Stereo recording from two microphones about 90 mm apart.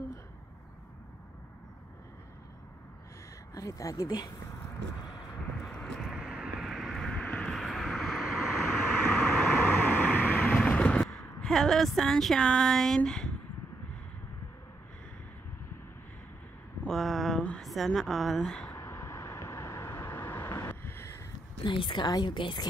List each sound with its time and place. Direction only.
3.5 s speech: 40° left (ahead or behind)
5.7 s vehicle: 10° left (ahead or behind)
6.0 s vehicle: 10° right (ahead or behind)
7.2 s vehicle: 15° left (ahead or behind)
7.5 s vehicle: centre (ahead or behind)
8.8 s vehicle: 20° left (ahead or behind)
11.4 s speech: 5° left (ahead or behind)
16.8 s a sound: 5° left (ahead or behind)
17.4 s a sound: 10° left (ahead or behind)
17.6 s speech: centre (ahead or behind)
18.7 s vehicle: 30° left (ahead or behind)
21.6 s a woman's voice: 65° left (ahead or behind)